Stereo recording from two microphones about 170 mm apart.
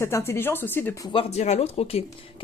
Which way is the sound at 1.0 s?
35° left (ahead or behind).